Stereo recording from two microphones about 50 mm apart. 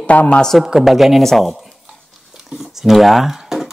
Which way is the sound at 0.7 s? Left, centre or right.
Centre.